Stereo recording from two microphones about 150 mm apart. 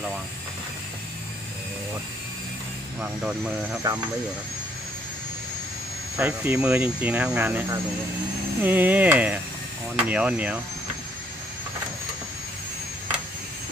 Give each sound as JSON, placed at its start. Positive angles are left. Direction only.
{"t": 3.0, "sound": "speech", "side_deg": -10}
{"t": 3.8, "sound": "speech", "side_deg": -25}
{"t": 6.1, "sound": "speech", "side_deg": -10}